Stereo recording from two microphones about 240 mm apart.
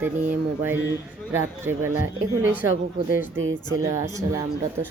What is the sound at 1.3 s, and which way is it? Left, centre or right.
Speech, centre.